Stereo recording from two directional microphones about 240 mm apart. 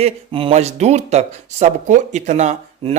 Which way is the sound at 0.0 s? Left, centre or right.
Right.